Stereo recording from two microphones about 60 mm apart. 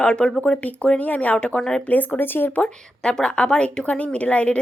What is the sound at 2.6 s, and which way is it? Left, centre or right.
Speech, centre.